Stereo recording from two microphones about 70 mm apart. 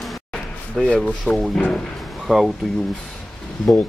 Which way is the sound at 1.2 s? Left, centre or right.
Centre.